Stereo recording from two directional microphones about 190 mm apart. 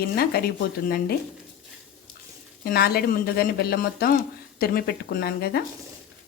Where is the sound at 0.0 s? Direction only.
55° left (ahead or behind).